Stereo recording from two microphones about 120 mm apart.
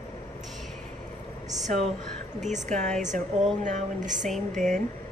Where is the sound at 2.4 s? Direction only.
80° right.